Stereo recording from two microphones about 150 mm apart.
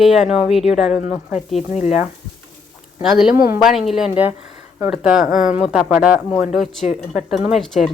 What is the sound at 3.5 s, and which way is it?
Speech, centre (ahead or behind).